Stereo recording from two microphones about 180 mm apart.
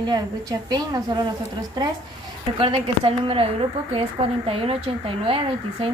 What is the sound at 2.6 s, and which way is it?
A woman's voice, 30° right (ahead or behind).